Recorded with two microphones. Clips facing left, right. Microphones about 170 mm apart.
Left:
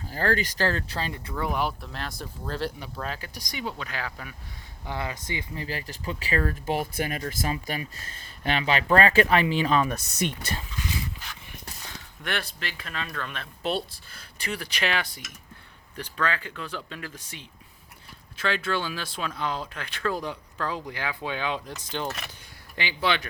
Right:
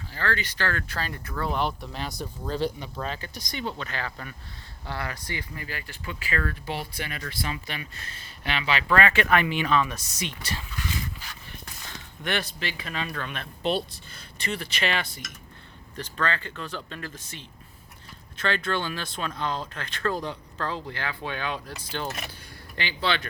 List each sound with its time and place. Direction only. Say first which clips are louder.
0.1 s speech: left 4 dB; 40° left (ahead or behind); by 1.2 s 20° left (ahead or behind)
1.3 s speech: right 1 dB; 10° left (ahead or behind)
4.9 s speech: left 1 dB; 20° left (ahead or behind)
5.6 s speech: left 4 dB; 35° left (ahead or behind)
9.9 s speech: left 6 dB; 50° left (ahead or behind)
12.2 s speech: right 3 dB; centre (ahead or behind)
22.7 s speech: left 1 dB; 15° left (ahead or behind)